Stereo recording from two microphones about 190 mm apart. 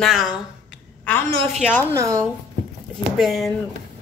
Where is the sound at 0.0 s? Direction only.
Centre (ahead or behind).